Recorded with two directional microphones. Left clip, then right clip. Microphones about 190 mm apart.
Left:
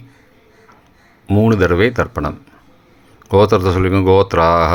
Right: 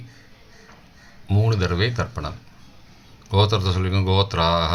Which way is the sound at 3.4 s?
45° left (ahead or behind).